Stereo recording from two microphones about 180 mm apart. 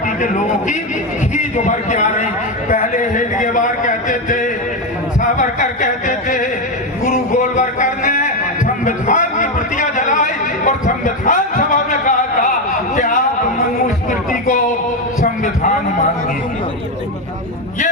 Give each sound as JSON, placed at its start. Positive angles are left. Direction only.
{"t": 0.2, "sound": "a man's voice", "side_deg": 45}
{"t": 7.0, "sound": "a sound", "side_deg": 45}
{"t": 14.1, "sound": "music", "side_deg": 45}